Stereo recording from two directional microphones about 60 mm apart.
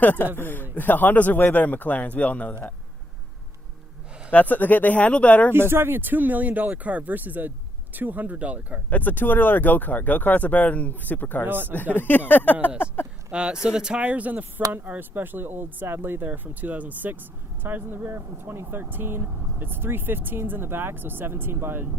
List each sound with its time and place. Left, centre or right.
0.0 s a man's voice: left
4.3 s speech: left
5.5 s speech: right
8.9 s speech: left
11.4 s speech: right
11.9 s a man's voice: left
13.3 s speech: centre
14.0 s speech: right